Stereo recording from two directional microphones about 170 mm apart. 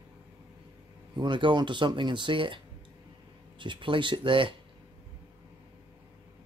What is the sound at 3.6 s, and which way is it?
Speech, 30° right (ahead or behind).